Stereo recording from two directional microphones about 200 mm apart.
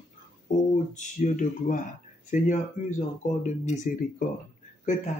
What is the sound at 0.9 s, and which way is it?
Speech, 40° left (ahead or behind).